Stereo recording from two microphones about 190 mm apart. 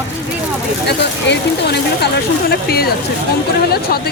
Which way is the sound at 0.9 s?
60° left (ahead or behind).